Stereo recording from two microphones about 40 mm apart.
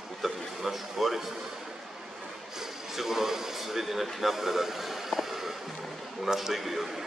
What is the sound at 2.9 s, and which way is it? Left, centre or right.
A man's voice, centre.